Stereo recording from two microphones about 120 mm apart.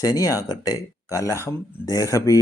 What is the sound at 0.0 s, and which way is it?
A man's voice, 30° left (ahead or behind).